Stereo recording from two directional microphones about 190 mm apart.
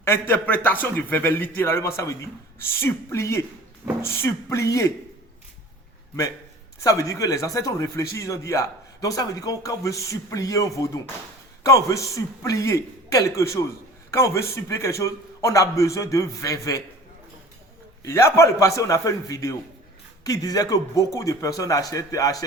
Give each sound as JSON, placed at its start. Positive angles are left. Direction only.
{"t": 0.0, "sound": "speech", "side_deg": 10}
{"t": 6.8, "sound": "speech", "side_deg": 15}
{"t": 18.0, "sound": "a man's voice", "side_deg": 15}